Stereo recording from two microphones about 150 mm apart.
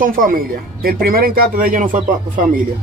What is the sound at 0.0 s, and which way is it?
Speech, 70° right (ahead or behind).